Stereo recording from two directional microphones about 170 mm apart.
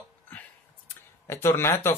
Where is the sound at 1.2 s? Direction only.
15° left (ahead or behind).